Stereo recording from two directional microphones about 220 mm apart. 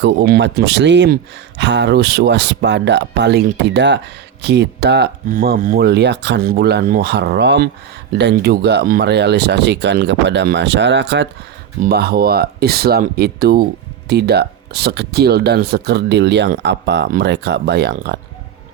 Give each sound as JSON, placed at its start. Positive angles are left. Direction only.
{"t": 0.0, "sound": "speech", "side_deg": -50}